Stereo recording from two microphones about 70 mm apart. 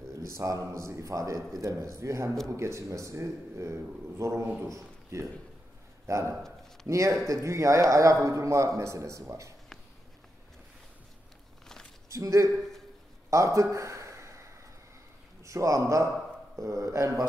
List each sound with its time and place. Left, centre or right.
0.4 s a man's voice: right
6.9 s a man's voice: right
11.6 s a sound: centre
12.1 s a man's voice: right
13.3 s a sound: right
15.4 s a man's voice: right